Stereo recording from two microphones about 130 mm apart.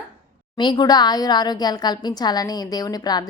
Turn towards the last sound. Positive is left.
turn(degrees=30)  # may be behind; listen again after turning